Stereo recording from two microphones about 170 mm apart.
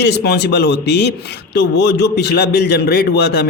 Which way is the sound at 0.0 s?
75° left (ahead or behind).